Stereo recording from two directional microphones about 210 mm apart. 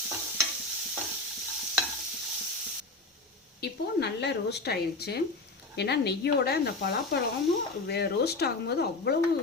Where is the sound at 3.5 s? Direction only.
55° left (ahead or behind).